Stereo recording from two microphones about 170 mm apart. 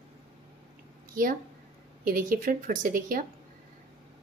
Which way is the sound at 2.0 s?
55° right (ahead or behind).